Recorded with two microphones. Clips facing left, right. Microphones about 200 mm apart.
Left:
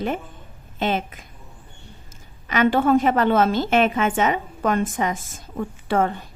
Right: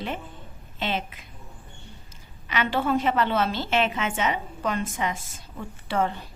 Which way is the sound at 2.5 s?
50° left (ahead or behind).